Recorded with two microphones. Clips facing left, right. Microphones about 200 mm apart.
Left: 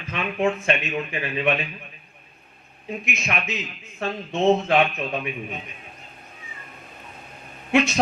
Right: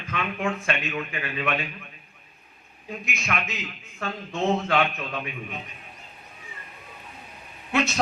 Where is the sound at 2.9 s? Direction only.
20° left (ahead or behind).